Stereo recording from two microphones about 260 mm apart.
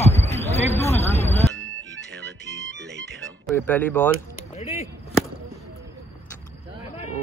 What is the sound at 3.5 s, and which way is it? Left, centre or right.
Speech, centre.